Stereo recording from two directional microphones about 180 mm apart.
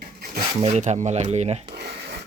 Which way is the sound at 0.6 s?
40° right (ahead or behind).